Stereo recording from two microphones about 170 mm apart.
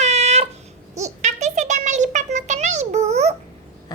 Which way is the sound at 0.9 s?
40° right (ahead or behind).